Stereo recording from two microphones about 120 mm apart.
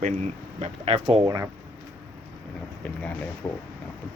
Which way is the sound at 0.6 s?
55° right (ahead or behind).